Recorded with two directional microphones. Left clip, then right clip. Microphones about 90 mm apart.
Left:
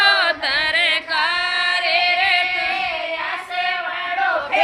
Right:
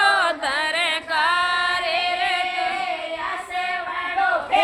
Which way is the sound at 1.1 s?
45° right (ahead or behind).